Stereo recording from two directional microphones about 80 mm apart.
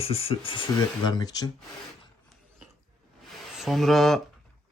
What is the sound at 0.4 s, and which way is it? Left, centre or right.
Speech, left.